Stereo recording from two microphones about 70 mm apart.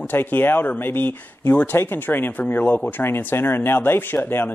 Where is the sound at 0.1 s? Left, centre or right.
Left.